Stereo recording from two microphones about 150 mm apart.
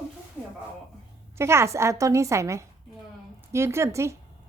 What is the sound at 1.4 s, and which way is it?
A woman's voice, 15° right (ahead or behind).